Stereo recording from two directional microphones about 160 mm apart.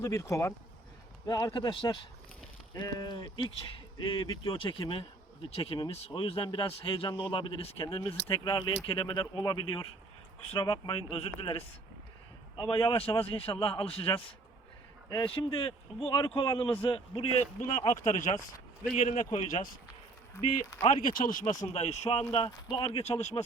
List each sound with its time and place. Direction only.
0.0 s speech: 20° left (ahead or behind); by 17.2 s 35° left (ahead or behind)
17.7 s speech: 50° left (ahead or behind)
19.5 s speech: 55° left (ahead or behind)
21.0 s speech: 60° left (ahead or behind); by 23.4 s 40° left (ahead or behind)